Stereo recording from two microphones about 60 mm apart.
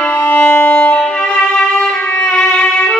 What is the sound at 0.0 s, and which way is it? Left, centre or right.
Music, left.